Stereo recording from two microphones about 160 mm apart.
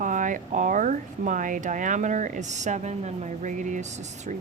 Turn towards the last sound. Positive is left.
turn(degrees=-50)  # may be behind; listen again after turning